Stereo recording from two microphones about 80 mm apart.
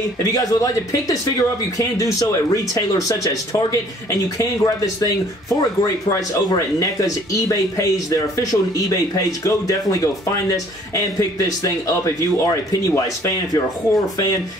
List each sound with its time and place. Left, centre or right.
0.2 s speech: left